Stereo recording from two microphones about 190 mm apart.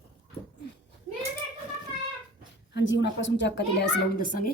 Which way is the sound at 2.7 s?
70° left (ahead or behind).